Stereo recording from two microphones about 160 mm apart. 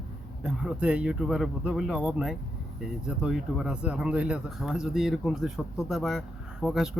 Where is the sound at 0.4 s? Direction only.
5° right (ahead or behind).